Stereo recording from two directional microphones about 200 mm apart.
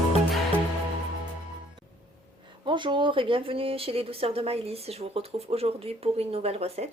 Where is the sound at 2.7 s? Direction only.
25° right (ahead or behind).